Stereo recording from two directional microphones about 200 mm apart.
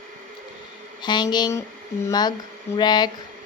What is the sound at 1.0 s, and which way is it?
Speech, 20° left (ahead or behind).